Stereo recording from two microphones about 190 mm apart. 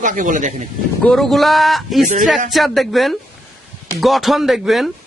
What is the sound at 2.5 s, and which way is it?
Speech, centre (ahead or behind).